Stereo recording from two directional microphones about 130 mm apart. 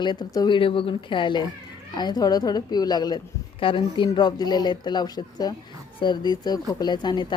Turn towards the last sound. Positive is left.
turn(degrees=35)  # may be behind; listen again after turning